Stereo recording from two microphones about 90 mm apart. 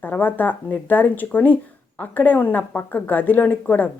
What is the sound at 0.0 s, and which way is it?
Speech, 20° left (ahead or behind).